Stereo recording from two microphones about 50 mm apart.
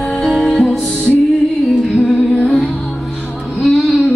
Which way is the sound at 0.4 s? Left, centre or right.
Centre.